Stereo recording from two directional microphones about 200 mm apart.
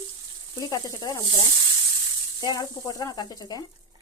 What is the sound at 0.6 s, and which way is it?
Speech, 20° left (ahead or behind).